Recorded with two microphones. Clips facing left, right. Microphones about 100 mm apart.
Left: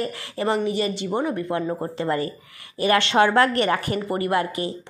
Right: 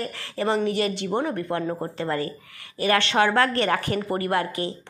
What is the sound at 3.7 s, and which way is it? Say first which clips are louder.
Speech: even; 40° right (ahead or behind).